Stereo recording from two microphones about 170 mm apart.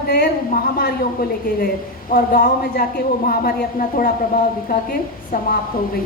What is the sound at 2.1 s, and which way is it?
A woman's voice, 55° left (ahead or behind).